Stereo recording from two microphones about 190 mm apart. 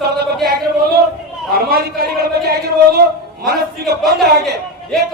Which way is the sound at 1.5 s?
55° right (ahead or behind).